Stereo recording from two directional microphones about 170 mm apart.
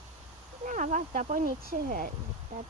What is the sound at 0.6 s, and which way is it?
Speech, 50° right (ahead or behind).